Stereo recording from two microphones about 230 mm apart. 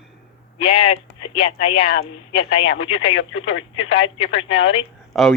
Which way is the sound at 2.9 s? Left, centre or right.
Left.